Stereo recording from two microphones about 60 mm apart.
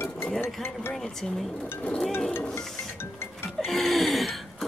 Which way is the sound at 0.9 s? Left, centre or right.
Centre.